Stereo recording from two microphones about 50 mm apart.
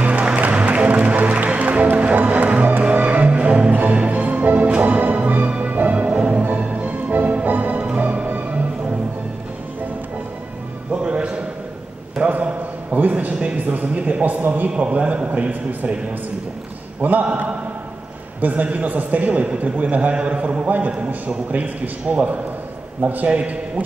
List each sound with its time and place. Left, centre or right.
0.0 s music: right
10.9 s music: centre
12.2 s a sound: right
17.0 s a man's voice: right